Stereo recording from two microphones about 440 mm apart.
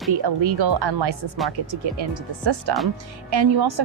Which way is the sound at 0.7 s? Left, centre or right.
Right.